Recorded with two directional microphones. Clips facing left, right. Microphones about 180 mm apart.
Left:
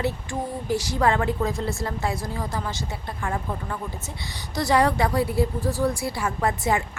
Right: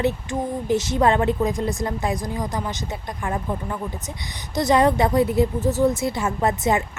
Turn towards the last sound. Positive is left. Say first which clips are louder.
# right 3 dB
turn(degrees=-20)  # may be behind; listen again after turning